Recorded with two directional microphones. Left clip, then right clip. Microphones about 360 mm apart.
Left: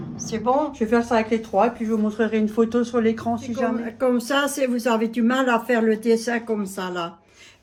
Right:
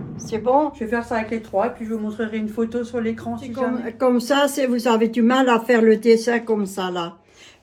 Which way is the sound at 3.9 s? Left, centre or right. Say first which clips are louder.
Right 6 dB; centre.